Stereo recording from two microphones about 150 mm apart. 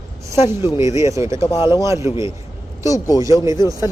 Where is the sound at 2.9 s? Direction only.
20° left (ahead or behind).